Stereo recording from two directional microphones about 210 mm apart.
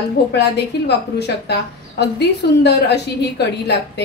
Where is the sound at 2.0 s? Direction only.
50° left (ahead or behind).